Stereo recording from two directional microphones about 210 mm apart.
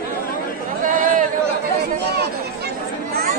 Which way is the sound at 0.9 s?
40° right (ahead or behind).